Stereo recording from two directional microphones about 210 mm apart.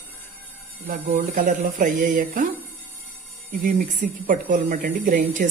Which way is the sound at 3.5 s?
40° right (ahead or behind).